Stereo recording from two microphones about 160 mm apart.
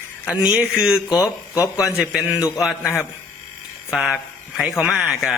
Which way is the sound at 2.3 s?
20° left (ahead or behind).